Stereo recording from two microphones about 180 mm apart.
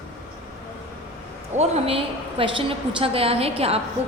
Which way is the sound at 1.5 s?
35° right (ahead or behind).